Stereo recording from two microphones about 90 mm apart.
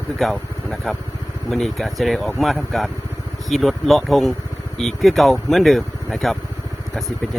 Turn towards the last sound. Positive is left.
turn(degrees=5)  # may be behind; listen again after turning